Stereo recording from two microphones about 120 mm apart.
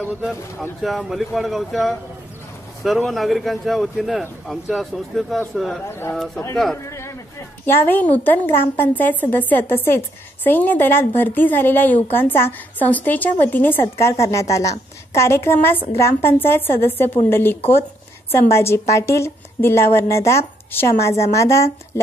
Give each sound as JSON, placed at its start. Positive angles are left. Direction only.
{"t": 0.2, "sound": "speech", "side_deg": 0}
{"t": 3.1, "sound": "speech", "side_deg": 0}
{"t": 5.9, "sound": "a woman's voice", "side_deg": 20}
{"t": 6.1, "sound": "speech", "side_deg": 0}
{"t": 6.8, "sound": "a sound", "side_deg": 25}
{"t": 7.6, "sound": "a woman's voice", "side_deg": 20}